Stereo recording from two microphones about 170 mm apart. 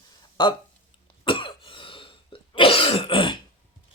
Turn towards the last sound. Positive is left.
turn(degrees=30)  # may be behind; listen again after turning